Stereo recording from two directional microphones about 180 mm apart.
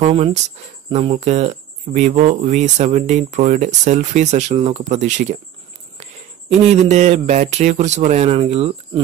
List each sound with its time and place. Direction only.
0.1 s speech: 35° right (ahead or behind)
6.7 s speech: 40° right (ahead or behind)